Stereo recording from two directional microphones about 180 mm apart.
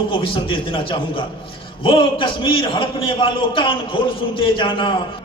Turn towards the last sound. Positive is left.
turn(degrees=30)  # may be behind; listen again after turning